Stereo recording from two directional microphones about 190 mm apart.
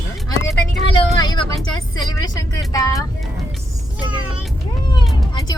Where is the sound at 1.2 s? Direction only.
20° left (ahead or behind).